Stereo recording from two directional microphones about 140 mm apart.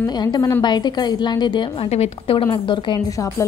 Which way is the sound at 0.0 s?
30° left (ahead or behind).